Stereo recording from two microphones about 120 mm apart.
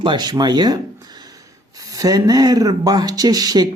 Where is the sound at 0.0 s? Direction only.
35° right (ahead or behind).